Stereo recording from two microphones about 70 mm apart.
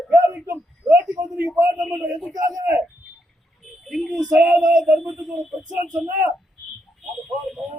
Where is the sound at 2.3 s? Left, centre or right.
Right.